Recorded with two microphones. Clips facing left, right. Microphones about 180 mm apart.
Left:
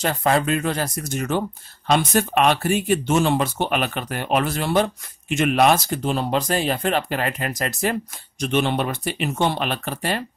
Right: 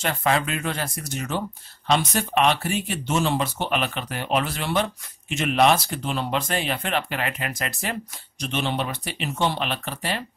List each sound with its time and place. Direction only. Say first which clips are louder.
0.0 s speech: left 3 dB; 40° left (ahead or behind)